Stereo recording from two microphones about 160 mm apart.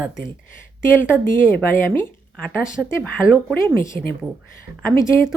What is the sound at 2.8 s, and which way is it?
Speech, 5° right (ahead or behind).